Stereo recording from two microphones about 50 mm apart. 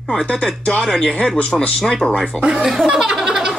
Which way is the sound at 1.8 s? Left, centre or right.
Centre.